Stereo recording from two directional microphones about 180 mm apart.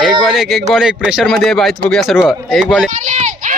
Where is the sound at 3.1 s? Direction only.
40° right (ahead or behind).